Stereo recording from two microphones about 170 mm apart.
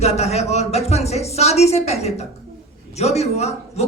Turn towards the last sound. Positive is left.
turn(degrees=40)  # may be behind; listen again after turning